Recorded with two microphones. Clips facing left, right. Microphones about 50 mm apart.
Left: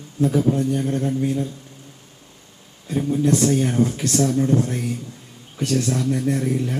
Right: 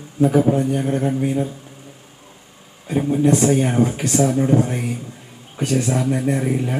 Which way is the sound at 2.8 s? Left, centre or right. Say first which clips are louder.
Right 3 dB; right.